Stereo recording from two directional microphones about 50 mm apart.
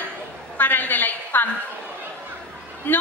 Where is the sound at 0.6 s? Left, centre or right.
Left.